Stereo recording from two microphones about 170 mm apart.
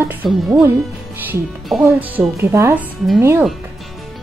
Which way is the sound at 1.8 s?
10° right (ahead or behind).